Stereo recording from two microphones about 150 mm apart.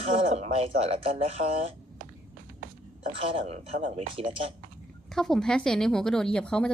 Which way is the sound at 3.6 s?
55° right (ahead or behind).